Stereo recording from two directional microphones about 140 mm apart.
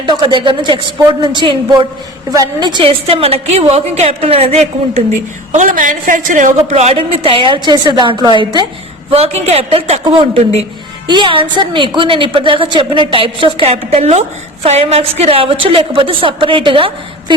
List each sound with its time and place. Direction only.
0.0 s a woman's voice: 35° right (ahead or behind)
3.1 s a woman's voice: 45° right (ahead or behind); by 6.5 s 65° right (ahead or behind)
6.6 s a woman's voice: 50° right (ahead or behind); by 8.6 s 30° right (ahead or behind)
9.0 s a woman's voice: 45° right (ahead or behind)
11.1 s a woman's voice: 35° right (ahead or behind)